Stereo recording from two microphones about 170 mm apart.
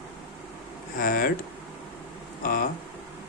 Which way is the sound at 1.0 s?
55° left (ahead or behind).